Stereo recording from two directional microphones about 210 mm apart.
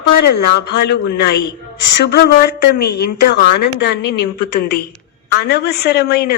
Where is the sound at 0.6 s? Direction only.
50° left (ahead or behind).